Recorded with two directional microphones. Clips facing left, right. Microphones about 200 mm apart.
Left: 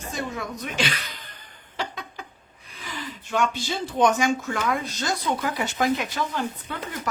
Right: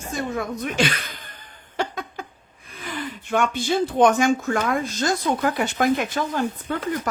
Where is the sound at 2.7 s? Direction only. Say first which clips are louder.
Right 5 dB; 55° right (ahead or behind).